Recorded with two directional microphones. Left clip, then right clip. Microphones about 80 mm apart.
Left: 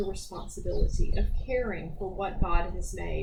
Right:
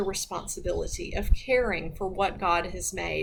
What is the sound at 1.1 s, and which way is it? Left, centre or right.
A woman's voice, right.